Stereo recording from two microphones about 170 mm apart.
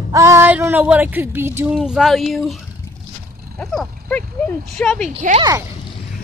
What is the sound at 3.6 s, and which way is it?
Speech, centre (ahead or behind).